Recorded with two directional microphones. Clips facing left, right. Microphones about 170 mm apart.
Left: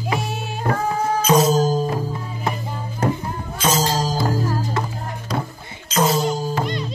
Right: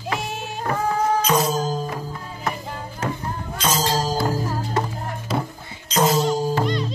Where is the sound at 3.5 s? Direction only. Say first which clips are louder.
Left 2 dB; 10° left (ahead or behind).